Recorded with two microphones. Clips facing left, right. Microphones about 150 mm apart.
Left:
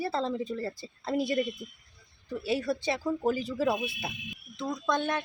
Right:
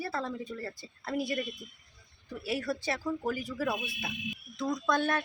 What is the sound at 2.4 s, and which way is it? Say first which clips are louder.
A woman's voice: left 3 dB; 25° left (ahead or behind).